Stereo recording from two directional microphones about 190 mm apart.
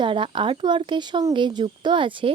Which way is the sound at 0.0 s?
25° right (ahead or behind).